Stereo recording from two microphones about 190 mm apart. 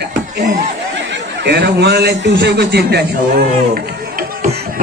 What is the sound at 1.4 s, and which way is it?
A man's voice, 60° right (ahead or behind).